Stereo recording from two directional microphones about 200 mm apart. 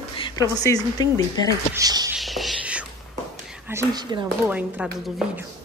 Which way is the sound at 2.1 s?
Centre (ahead or behind).